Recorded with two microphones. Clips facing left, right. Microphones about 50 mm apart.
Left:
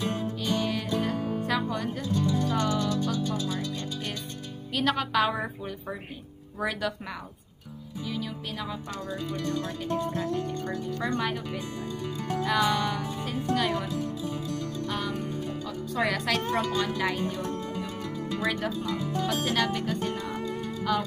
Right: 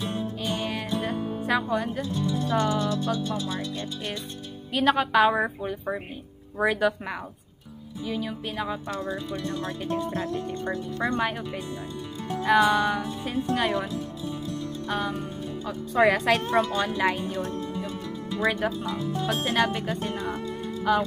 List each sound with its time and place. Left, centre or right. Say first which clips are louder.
0.4 s music: left 1 dB; right
1.5 s a woman's voice: right 7 dB; centre
2.5 s music: right 2 dB; right
4.7 s a woman's voice: right 5 dB; centre
8.0 s music: right 4 dB; centre
14.9 s music: right 4 dB; right